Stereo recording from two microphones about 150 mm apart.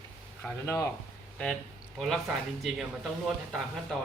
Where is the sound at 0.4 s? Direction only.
15° left (ahead or behind).